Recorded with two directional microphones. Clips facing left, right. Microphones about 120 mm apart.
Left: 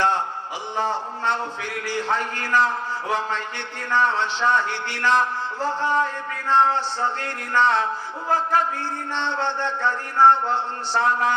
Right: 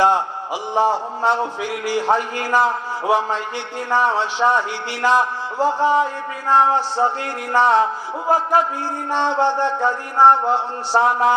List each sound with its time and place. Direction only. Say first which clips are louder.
0.8 s a man's voice: right 7 dB; 15° right (ahead or behind)
9.0 s speech: right 9 dB; 40° right (ahead or behind)
9.3 s a man's voice: right 7 dB; 10° right (ahead or behind)